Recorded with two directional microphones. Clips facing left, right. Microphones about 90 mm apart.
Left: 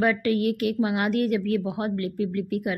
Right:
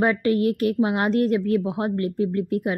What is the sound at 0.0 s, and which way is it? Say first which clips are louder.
A woman's voice: right 2 dB; 30° right (ahead or behind).